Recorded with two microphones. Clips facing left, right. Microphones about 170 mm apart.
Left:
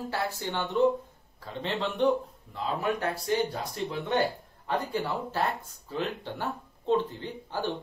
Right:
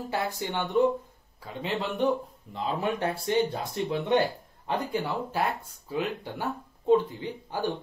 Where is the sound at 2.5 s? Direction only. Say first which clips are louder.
Right 1 dB; 25° right (ahead or behind).